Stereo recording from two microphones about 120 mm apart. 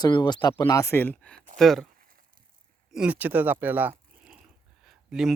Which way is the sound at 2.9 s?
10° right (ahead or behind).